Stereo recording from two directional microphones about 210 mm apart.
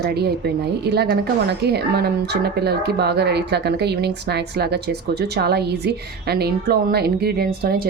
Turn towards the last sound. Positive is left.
turn(degrees=-45)  # may be behind; listen again after turning